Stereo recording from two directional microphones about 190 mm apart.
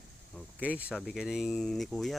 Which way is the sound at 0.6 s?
5° right (ahead or behind).